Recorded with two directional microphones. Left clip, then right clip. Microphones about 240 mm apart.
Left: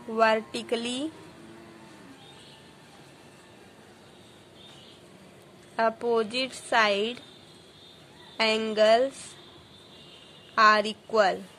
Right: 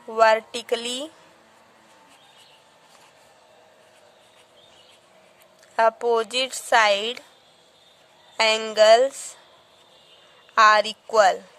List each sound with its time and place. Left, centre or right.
0.1 s a woman's voice: right
5.8 s a woman's voice: right
8.4 s a woman's voice: right
10.5 s a woman's voice: right